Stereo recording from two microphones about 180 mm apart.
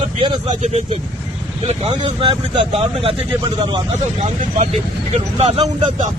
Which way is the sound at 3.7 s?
35° right (ahead or behind).